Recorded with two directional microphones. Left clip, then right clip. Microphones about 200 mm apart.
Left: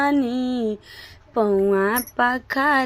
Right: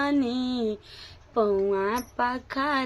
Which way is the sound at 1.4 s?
30° left (ahead or behind).